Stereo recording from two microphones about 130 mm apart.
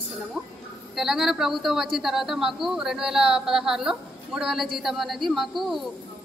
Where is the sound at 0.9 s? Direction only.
Centre (ahead or behind).